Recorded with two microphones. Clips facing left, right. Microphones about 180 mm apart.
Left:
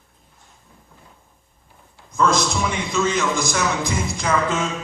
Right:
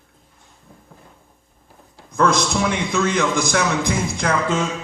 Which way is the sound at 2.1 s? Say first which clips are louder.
Right 1 dB; 60° right (ahead or behind).